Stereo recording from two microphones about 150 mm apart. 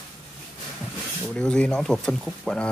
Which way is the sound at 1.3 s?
5° left (ahead or behind).